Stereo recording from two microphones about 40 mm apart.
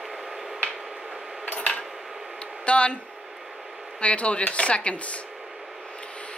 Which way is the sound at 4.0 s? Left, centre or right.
Left.